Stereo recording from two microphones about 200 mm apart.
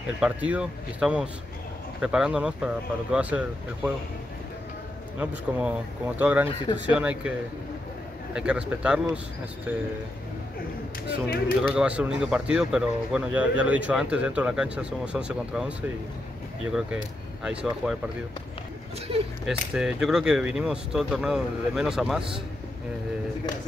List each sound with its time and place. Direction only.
0.2 s speech: 5° right (ahead or behind)
5.2 s speech: 5° right (ahead or behind)
8.4 s speech: 5° right (ahead or behind)
11.2 s speech: 45° left (ahead or behind)
11.7 s speech: 5° right (ahead or behind)
16.7 s speech: 5° right (ahead or behind)
19.4 s speech: 5° right (ahead or behind)